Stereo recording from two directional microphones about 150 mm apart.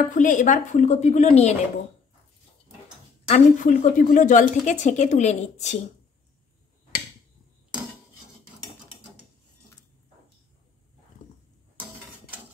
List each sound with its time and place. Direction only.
0.1 s speech: 60° left (ahead or behind)
3.3 s speech: 55° left (ahead or behind)